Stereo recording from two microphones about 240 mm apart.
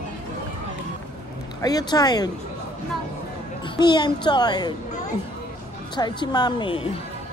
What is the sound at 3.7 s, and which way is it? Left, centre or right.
Speech, centre.